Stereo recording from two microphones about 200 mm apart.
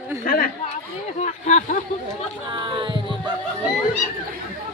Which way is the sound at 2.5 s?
25° right (ahead or behind).